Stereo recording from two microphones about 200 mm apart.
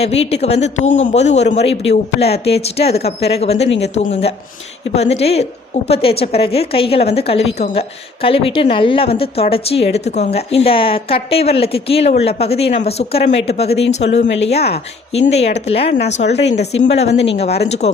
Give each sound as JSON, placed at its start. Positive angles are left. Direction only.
{"t": 0.0, "sound": "a woman's voice", "side_deg": 30}
{"t": 13.7, "sound": "speech", "side_deg": 60}
{"t": 14.5, "sound": "speech", "side_deg": 30}